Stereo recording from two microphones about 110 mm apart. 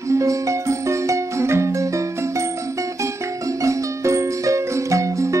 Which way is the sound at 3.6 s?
25° right (ahead or behind).